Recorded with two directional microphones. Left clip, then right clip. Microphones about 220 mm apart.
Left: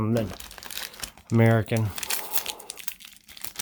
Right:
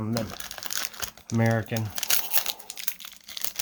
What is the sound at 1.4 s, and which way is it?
Speech, 50° left (ahead or behind).